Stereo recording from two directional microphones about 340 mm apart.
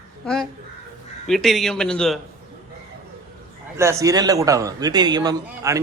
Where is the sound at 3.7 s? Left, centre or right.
Centre.